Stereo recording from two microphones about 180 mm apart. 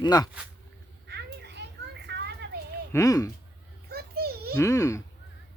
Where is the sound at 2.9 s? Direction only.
20° left (ahead or behind).